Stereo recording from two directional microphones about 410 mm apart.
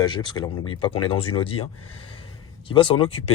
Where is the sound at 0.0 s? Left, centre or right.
Centre.